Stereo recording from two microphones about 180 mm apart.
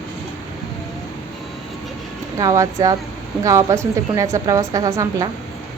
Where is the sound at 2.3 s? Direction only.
15° right (ahead or behind).